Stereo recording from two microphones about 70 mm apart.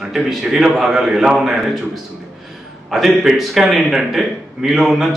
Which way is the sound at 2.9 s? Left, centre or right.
Centre.